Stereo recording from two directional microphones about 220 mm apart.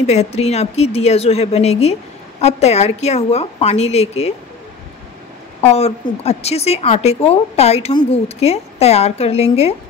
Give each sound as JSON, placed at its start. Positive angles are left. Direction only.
{"t": 0.0, "sound": "a woman's voice", "side_deg": 30}
{"t": 5.6, "sound": "a woman's voice", "side_deg": 30}